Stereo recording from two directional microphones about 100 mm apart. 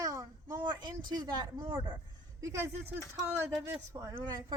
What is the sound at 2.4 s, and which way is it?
A woman's voice, 30° right (ahead or behind).